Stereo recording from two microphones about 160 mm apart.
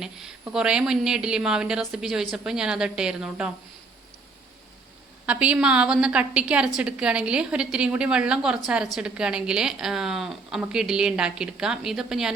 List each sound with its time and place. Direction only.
0.0 s a woman's voice: 5° right (ahead or behind)
5.2 s a woman's voice: 10° right (ahead or behind)